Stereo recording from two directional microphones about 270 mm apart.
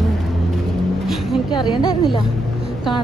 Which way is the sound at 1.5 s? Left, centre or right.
Centre.